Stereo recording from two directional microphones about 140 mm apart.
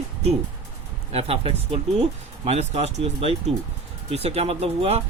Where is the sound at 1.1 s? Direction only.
45° right (ahead or behind).